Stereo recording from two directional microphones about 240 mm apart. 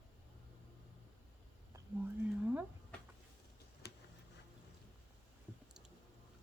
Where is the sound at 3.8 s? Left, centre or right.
Left.